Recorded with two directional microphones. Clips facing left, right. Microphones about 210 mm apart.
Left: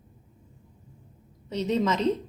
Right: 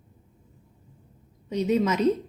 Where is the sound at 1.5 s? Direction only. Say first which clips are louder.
Right 2 dB; 10° right (ahead or behind).